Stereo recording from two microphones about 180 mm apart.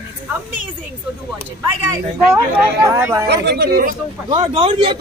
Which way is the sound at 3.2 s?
65° right (ahead or behind).